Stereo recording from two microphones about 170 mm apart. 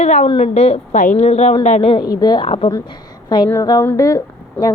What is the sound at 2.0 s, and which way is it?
Speech, 25° left (ahead or behind).